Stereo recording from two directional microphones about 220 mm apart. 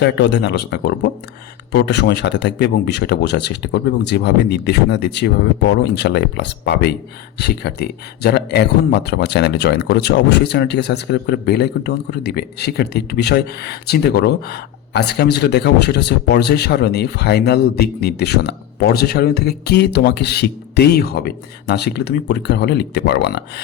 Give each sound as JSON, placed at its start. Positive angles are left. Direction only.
{"t": 0.0, "sound": "speech", "side_deg": 55}